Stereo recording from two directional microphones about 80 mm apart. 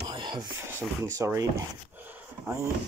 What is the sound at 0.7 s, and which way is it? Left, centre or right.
Speech, right.